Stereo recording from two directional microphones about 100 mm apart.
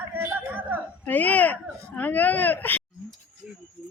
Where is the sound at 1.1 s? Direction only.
15° left (ahead or behind).